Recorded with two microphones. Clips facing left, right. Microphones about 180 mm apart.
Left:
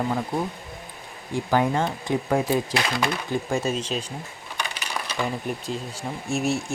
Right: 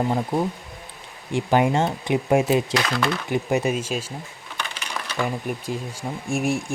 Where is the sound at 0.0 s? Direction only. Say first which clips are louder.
Right 3 dB; 20° right (ahead or behind).